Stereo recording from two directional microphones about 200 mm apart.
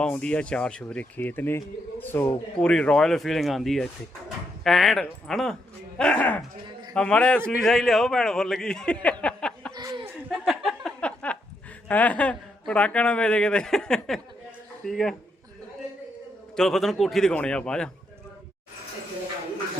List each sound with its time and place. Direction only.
0.0 s speech: 5° left (ahead or behind)
9.2 s a sound: 5° left (ahead or behind)
9.7 s chuckle: 20° right (ahead or behind)
10.2 s a sound: centre (ahead or behind)
11.9 s a woman's voice: 5° left (ahead or behind)
16.6 s speech: centre (ahead or behind)